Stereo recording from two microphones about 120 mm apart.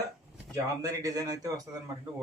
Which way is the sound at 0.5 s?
30° right (ahead or behind).